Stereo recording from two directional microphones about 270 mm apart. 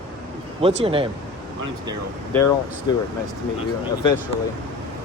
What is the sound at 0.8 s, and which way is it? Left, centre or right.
Speech, centre.